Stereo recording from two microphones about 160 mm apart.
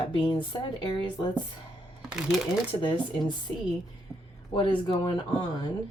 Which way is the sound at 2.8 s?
30° left (ahead or behind).